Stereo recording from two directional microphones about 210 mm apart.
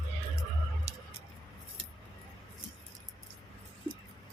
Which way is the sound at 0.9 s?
30° right (ahead or behind).